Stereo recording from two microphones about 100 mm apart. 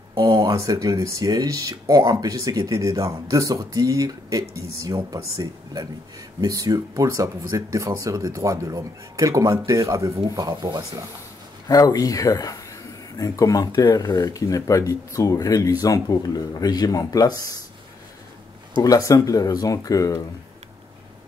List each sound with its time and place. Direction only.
0.1 s speech: 40° right (ahead or behind)
11.6 s speech: 40° left (ahead or behind)
18.8 s speech: 35° left (ahead or behind)